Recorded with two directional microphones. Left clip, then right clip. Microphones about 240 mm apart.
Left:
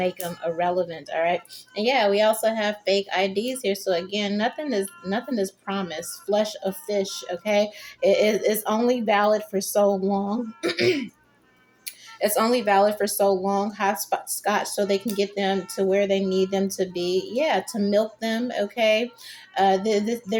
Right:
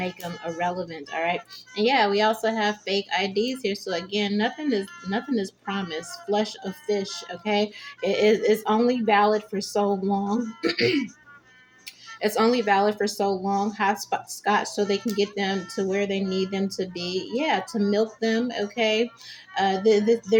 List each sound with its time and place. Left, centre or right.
0.5 s speech: centre
12.2 s speech: centre